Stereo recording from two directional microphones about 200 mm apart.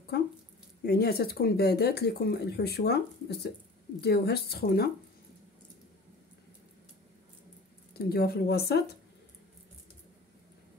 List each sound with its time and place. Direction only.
0.8 s speech: 50° left (ahead or behind)
7.9 s speech: 50° left (ahead or behind)